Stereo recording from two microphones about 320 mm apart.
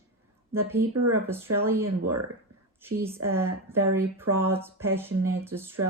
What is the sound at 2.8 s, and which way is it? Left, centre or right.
Speech, centre.